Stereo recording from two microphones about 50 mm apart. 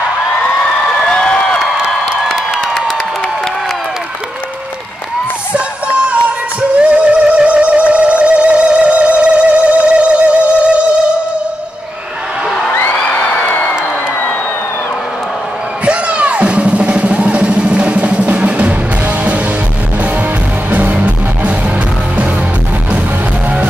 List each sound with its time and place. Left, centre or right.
1.1 s a sound: centre
5.5 s music: right
13.1 s music: left
15.8 s music: right
20.7 s music: right